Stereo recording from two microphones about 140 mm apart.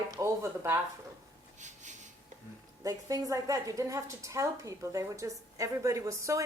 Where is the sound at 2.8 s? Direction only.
25° right (ahead or behind).